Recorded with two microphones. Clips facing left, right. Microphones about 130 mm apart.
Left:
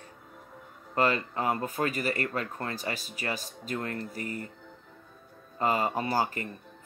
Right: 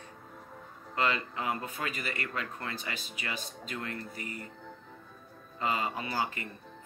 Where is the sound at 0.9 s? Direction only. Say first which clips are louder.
Left 4 dB; 40° left (ahead or behind).